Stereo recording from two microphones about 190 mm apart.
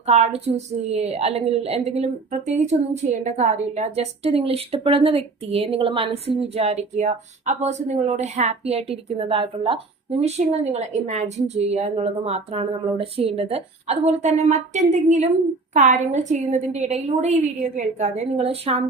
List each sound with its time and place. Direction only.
0.0 s a woman's voice: 35° right (ahead or behind)